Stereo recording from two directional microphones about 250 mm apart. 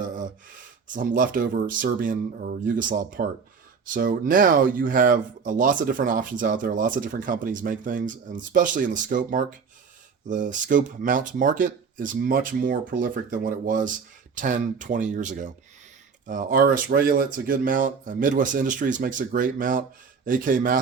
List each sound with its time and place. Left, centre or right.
0.9 s speech: right